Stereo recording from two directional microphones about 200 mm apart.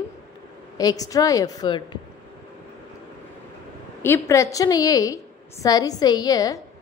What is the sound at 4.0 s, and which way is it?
A woman's voice, 15° left (ahead or behind).